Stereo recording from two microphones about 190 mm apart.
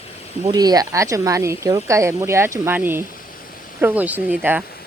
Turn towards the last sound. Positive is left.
turn(degrees=-10)  # may be behind; listen again after turning